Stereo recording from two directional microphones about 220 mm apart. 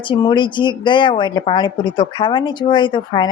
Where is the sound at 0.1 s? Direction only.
20° left (ahead or behind).